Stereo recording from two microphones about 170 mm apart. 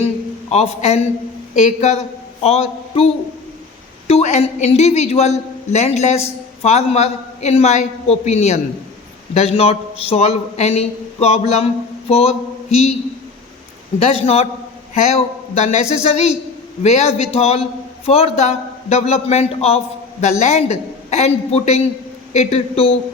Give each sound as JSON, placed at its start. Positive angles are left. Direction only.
{"t": 0.5, "sound": "a man's voice", "side_deg": 40}
{"t": 14.0, "sound": "a man's voice", "side_deg": 35}